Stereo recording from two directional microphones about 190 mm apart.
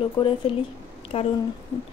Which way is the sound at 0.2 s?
30° left (ahead or behind).